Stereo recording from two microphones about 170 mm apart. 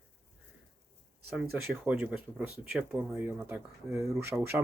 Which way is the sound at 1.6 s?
10° right (ahead or behind).